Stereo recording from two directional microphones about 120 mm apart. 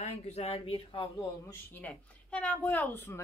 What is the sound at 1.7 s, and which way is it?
Speech, 10° left (ahead or behind).